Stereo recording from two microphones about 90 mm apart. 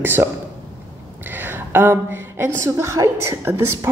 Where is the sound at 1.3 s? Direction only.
25° right (ahead or behind).